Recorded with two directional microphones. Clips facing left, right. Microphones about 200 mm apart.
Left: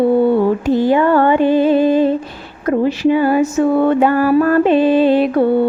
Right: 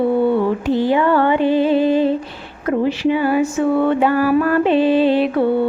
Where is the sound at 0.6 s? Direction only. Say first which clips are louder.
Left 3 dB; 45° left (ahead or behind).